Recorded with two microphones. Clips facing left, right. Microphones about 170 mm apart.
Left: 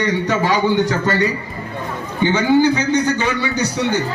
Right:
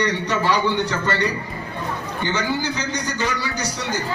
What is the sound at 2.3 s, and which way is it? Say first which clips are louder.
A man's voice: left 11 dB; 55° left (ahead or behind).